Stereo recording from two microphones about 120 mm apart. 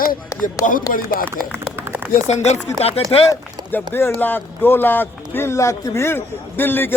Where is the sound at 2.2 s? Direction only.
70° left (ahead or behind).